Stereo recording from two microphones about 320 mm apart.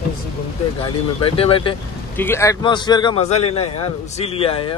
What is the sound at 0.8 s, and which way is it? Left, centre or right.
Speech, centre.